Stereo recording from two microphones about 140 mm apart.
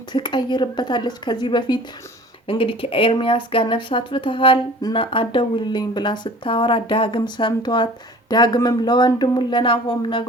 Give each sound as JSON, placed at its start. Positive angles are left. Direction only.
{"t": 0.1, "sound": "speech", "side_deg": 30}